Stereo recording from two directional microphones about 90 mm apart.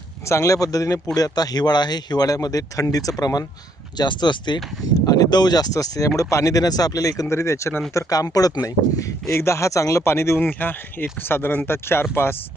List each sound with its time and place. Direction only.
0.3 s speech: 35° left (ahead or behind)